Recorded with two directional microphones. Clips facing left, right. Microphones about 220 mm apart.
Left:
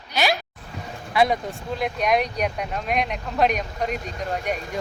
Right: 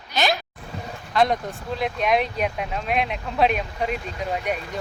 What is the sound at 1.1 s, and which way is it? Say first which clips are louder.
A man's voice: even; 10° left (ahead or behind).